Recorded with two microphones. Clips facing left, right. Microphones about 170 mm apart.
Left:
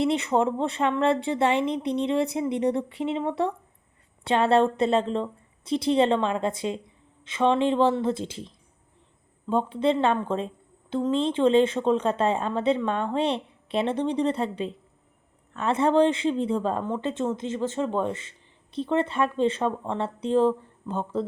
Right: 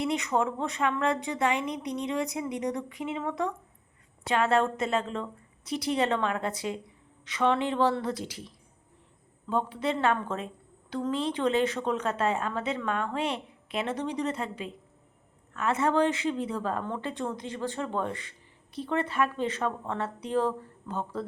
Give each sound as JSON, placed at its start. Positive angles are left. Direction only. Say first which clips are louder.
{"t": 0.0, "sound": "a woman's voice", "louder": "left 5 dB", "side_deg": 30}